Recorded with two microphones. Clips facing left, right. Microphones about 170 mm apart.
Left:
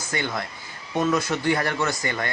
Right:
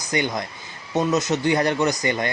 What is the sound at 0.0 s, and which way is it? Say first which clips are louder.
A man's voice: right 4 dB; 15° right (ahead or behind).